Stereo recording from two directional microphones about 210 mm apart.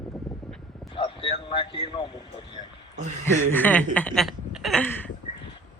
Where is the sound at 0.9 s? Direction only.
25° left (ahead or behind).